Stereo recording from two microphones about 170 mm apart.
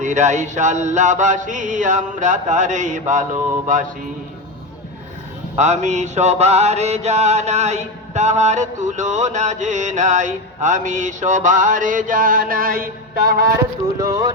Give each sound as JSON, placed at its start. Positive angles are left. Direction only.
{"t": 0.0, "sound": "mantra", "side_deg": -45}
{"t": 5.5, "sound": "mantra", "side_deg": -45}
{"t": 14.0, "sound": "speech", "side_deg": -20}